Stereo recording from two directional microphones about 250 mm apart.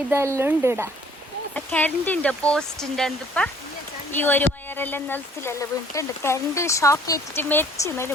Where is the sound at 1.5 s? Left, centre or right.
Centre.